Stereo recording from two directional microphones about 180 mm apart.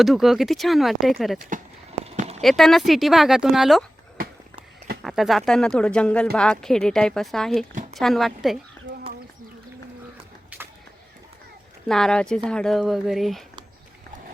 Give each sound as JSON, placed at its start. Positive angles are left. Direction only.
{"t": 0.0, "sound": "speech", "side_deg": 0}
{"t": 1.5, "sound": "horse", "side_deg": -40}
{"t": 2.4, "sound": "speech", "side_deg": 0}
{"t": 5.0, "sound": "speech", "side_deg": 0}
{"t": 11.9, "sound": "speech", "side_deg": 5}